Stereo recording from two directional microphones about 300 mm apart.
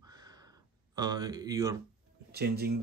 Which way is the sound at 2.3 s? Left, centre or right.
Right.